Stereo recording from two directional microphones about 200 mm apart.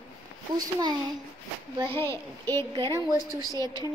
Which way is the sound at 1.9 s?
10° left (ahead or behind).